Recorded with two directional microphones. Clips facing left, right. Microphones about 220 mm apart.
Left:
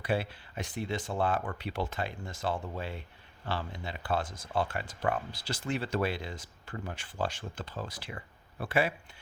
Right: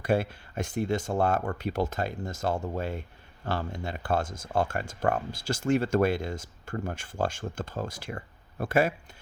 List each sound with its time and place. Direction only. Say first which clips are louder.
0.0 s speech: right 5 dB; 45° right (ahead or behind)